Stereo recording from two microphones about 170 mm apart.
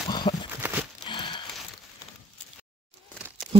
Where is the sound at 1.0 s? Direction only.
30° left (ahead or behind).